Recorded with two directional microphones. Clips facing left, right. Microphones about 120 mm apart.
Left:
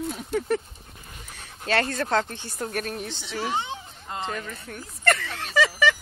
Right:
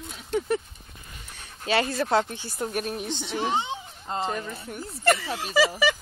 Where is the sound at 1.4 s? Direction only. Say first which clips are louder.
Even; 5° right (ahead or behind).